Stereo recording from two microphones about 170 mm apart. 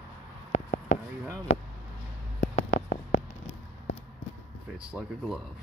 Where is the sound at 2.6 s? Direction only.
80° left.